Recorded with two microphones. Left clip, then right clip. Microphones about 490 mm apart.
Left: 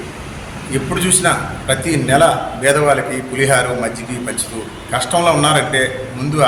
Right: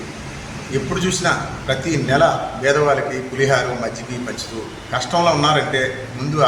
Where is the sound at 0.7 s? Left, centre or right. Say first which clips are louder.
Left 3 dB; right.